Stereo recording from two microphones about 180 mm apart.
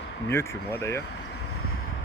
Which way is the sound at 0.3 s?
15° left (ahead or behind).